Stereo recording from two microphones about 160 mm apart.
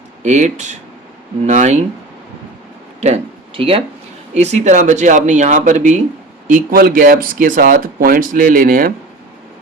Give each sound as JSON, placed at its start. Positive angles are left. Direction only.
{"t": 0.2, "sound": "speech", "side_deg": -45}
{"t": 3.0, "sound": "speech", "side_deg": -40}
{"t": 6.5, "sound": "speech", "side_deg": -65}